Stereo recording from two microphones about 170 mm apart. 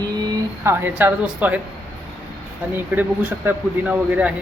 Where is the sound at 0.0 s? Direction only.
20° right (ahead or behind).